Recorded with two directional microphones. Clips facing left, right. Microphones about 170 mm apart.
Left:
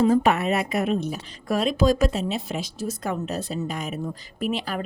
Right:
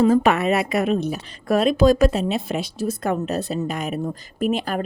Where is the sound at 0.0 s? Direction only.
90° right.